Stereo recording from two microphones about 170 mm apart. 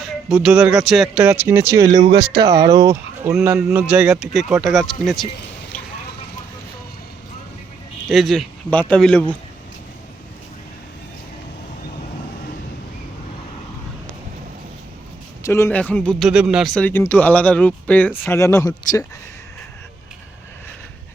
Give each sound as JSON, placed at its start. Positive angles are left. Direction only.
{"t": 0.0, "sound": "speech", "side_deg": -5}
{"t": 2.0, "sound": "speech", "side_deg": -70}
{"t": 2.6, "sound": "speech", "side_deg": -20}
{"t": 5.7, "sound": "vehicle", "side_deg": 10}
{"t": 8.1, "sound": "speech", "side_deg": 0}
{"t": 15.4, "sound": "speech", "side_deg": 15}
{"t": 16.3, "sound": "speech", "side_deg": -5}